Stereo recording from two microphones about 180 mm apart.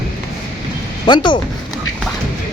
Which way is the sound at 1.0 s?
25° left (ahead or behind).